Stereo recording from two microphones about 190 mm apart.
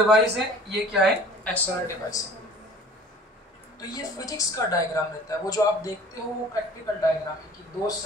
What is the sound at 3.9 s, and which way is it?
A woman's voice, 15° left (ahead or behind).